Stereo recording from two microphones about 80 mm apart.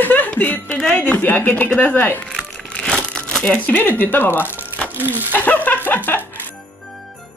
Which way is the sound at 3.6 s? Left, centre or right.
Left.